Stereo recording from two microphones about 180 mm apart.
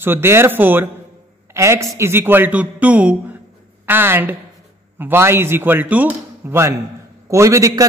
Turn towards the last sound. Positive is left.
turn(degrees=-20)  # may be behind; listen again after turning